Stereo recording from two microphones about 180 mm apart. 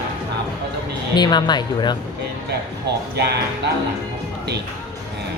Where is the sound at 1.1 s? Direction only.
25° left (ahead or behind).